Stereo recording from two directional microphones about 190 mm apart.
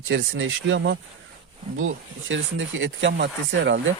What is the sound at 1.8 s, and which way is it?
Speech, 85° right.